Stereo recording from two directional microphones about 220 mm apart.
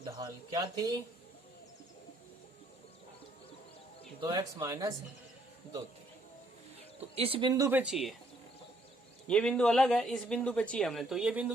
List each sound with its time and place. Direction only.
0.0 s speech: 15° right (ahead or behind)
4.2 s speech: 15° right (ahead or behind)
7.2 s speech: 25° right (ahead or behind); by 8.1 s centre (ahead or behind)
9.2 s speech: 5° left (ahead or behind)